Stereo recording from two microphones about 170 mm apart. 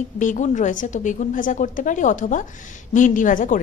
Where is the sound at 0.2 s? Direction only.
45° left (ahead or behind).